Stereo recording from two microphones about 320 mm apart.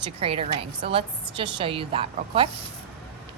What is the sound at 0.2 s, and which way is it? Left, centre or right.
A woman's voice, centre.